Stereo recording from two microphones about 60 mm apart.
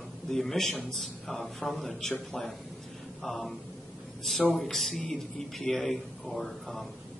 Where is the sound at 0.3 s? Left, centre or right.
Centre.